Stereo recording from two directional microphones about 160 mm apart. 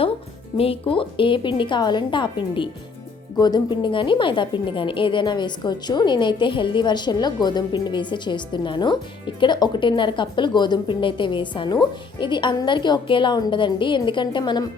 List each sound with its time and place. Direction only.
0.5 s a woman's voice: 35° left (ahead or behind)